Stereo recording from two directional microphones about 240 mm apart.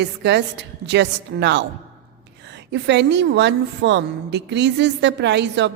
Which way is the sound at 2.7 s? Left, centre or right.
Right.